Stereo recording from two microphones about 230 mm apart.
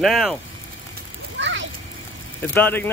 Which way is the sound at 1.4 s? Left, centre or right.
Right.